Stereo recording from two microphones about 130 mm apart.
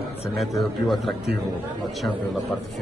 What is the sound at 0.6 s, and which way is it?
Speech, centre (ahead or behind).